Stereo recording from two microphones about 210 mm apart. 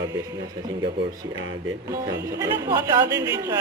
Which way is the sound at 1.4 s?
65° right (ahead or behind).